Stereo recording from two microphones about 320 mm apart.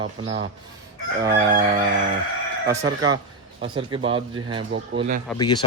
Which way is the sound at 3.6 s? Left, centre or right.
Centre.